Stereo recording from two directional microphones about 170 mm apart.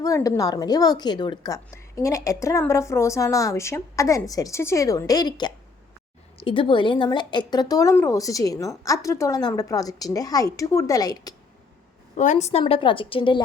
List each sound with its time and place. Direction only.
0.0 s a woman's voice: 20° left (ahead or behind)
12.1 s a woman's voice: 45° left (ahead or behind)